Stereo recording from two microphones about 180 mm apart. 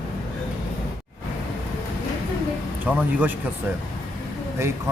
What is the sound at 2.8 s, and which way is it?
Speech, 10° right (ahead or behind).